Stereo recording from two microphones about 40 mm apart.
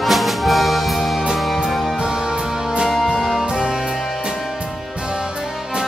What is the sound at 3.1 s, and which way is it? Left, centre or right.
Music, centre.